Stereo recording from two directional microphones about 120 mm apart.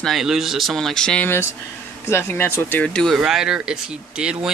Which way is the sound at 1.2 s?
20° left (ahead or behind).